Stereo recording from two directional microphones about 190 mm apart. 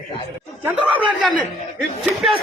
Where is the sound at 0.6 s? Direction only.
5° right (ahead or behind).